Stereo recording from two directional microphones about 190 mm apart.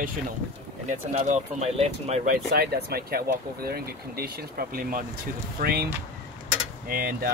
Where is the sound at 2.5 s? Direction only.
55° right (ahead or behind).